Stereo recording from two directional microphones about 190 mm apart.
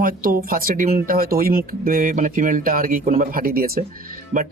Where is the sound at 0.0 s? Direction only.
50° right (ahead or behind).